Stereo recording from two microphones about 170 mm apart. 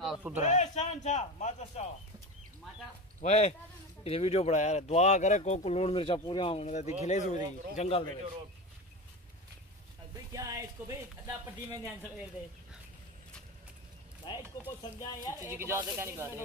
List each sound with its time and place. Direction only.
0.0 s speech: 5° right (ahead or behind)
0.4 s a man's voice: 40° left (ahead or behind)
3.2 s a man's voice: 40° left (ahead or behind)
10.3 s speech: 20° right (ahead or behind)
14.2 s speech: 30° left (ahead or behind)
15.4 s speech: 15° right (ahead or behind)